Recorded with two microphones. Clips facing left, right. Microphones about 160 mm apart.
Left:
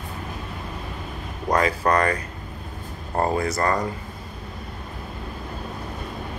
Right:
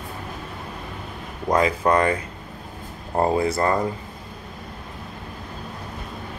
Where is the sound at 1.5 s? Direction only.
25° right (ahead or behind).